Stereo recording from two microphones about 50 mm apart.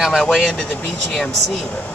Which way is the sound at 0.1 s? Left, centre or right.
Centre.